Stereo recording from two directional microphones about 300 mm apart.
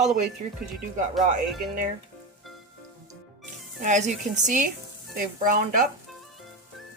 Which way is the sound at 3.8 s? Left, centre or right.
Right.